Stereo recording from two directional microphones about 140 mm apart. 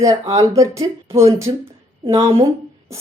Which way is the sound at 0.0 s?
20° right (ahead or behind).